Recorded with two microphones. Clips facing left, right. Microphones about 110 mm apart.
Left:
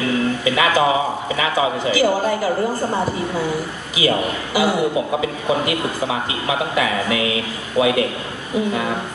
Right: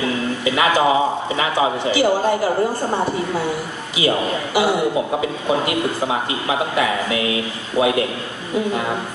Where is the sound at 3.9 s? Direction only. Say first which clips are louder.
Even; 25° right (ahead or behind).